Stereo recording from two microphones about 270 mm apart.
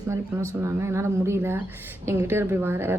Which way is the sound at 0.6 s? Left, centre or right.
Centre.